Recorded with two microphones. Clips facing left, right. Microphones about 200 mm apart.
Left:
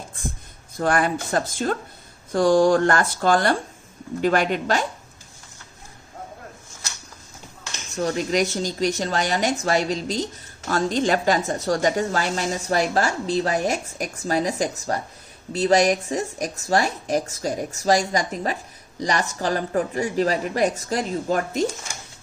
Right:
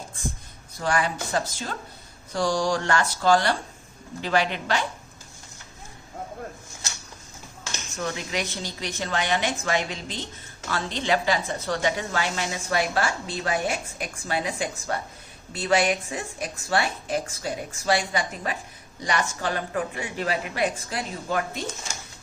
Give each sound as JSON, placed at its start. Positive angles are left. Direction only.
{"t": 0.8, "sound": "speech", "side_deg": 50}
{"t": 7.9, "sound": "a woman's voice", "side_deg": 40}